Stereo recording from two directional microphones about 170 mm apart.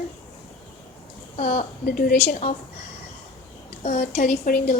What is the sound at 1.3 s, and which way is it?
Speech, 40° left (ahead or behind).